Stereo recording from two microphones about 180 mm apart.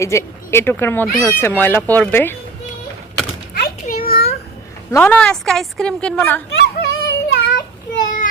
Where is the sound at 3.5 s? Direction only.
55° left (ahead or behind).